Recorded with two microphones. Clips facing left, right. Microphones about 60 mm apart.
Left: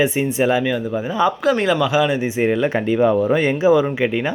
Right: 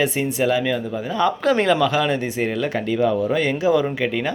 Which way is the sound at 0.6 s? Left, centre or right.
Centre.